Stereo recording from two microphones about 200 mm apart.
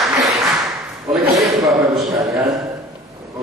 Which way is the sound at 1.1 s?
Centre (ahead or behind).